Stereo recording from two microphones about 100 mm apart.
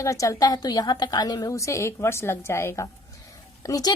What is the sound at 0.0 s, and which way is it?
Speech, 30° left (ahead or behind).